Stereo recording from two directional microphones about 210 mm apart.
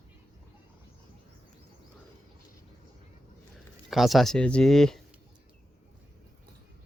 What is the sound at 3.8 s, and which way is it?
Speech, centre (ahead or behind).